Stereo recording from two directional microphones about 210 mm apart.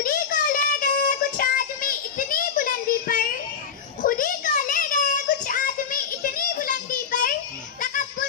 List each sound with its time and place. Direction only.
0.0 s child singing: 40° left (ahead or behind)